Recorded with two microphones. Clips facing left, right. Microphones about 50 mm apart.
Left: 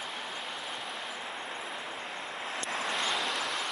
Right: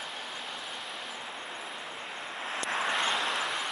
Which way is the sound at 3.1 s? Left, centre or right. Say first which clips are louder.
Right 2 dB; centre.